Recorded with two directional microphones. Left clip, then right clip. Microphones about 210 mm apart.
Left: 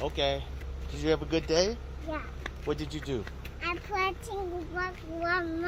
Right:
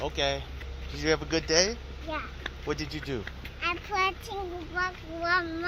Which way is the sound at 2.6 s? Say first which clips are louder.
Even; 10° right (ahead or behind).